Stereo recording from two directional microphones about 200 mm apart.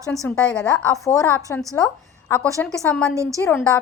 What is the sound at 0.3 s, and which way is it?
A woman's voice, 5° left (ahead or behind).